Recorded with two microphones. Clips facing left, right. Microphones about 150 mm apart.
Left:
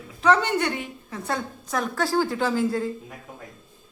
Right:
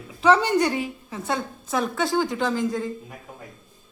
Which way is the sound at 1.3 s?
Centre (ahead or behind).